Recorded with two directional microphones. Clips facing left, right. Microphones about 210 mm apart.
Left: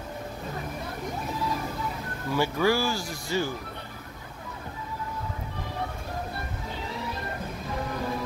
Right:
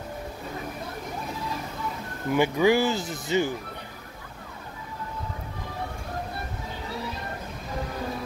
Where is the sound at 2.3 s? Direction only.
20° right (ahead or behind).